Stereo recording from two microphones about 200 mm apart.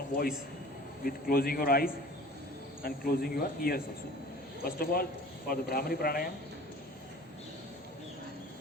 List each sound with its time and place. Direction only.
1.0 s speech: 50° left (ahead or behind)